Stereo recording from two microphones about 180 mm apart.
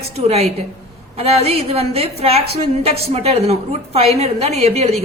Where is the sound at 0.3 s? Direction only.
35° right (ahead or behind).